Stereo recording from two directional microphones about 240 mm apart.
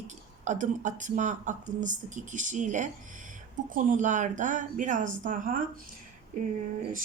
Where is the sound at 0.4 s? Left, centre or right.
Right.